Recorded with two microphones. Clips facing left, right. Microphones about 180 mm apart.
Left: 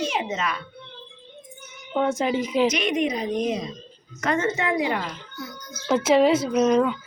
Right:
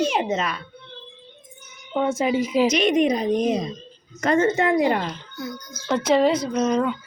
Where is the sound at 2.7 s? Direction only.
35° right (ahead or behind).